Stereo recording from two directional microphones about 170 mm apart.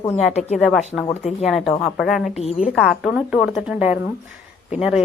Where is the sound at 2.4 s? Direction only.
40° left (ahead or behind).